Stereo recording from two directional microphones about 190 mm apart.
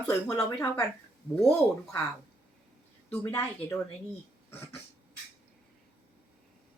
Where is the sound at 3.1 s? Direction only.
10° left (ahead or behind).